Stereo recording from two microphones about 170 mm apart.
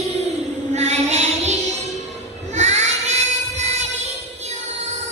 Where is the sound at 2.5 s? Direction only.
40° right (ahead or behind).